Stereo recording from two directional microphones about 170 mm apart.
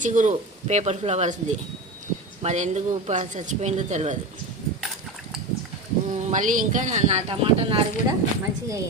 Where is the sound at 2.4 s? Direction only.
45° right (ahead or behind).